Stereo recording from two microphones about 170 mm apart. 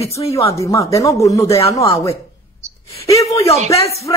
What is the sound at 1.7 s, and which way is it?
Speech, 30° left (ahead or behind).